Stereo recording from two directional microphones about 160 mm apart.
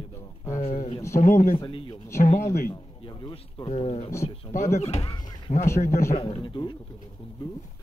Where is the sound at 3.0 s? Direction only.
30° left (ahead or behind).